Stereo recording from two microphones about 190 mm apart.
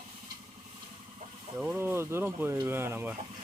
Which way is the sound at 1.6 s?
5° right (ahead or behind).